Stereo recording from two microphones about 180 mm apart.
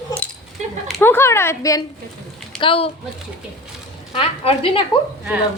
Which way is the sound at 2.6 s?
30° left (ahead or behind).